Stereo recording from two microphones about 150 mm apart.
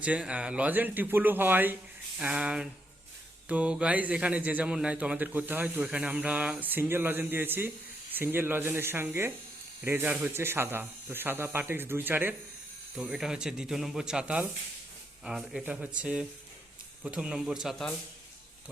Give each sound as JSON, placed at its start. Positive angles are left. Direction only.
{"t": 0.0, "sound": "a man's voice", "side_deg": -10}
{"t": 13.0, "sound": "a man's voice", "side_deg": -5}